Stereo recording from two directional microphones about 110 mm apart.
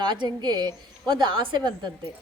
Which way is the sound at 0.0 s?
45° right (ahead or behind).